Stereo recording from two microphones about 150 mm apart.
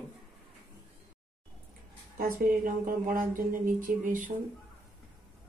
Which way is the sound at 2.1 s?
70° right (ahead or behind).